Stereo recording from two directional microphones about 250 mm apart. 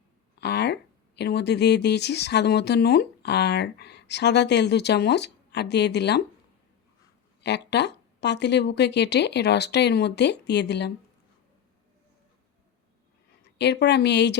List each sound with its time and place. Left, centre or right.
0.3 s speech: left
7.4 s speech: left
13.6 s speech: left